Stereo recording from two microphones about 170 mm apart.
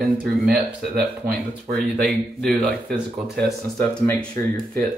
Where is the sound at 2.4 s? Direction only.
5° left (ahead or behind).